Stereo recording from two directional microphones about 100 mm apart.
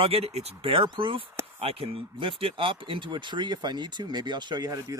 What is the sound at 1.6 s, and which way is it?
Speech, 75° right (ahead or behind).